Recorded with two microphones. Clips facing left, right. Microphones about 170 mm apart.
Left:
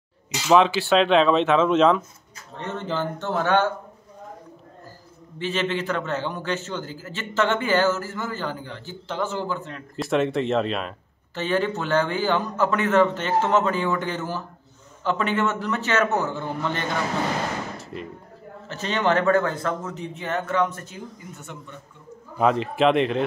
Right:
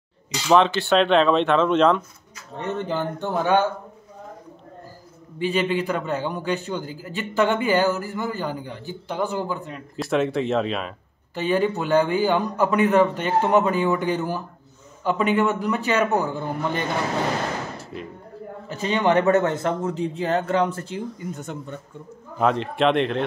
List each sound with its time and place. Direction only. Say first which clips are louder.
0.3 s speech: even; 5° left (ahead or behind)
2.6 s a man's voice: right 2 dB; 15° right (ahead or behind)
5.4 s a man's voice: right 3 dB; 10° right (ahead or behind)
9.9 s speech: even; centre (ahead or behind)
11.3 s a man's voice: right 2 dB; 15° right (ahead or behind)
18.7 s a man's voice: right 2 dB; 10° right (ahead or behind); by 21.0 s 30° right (ahead or behind)
22.4 s speech: left 1 dB; centre (ahead or behind)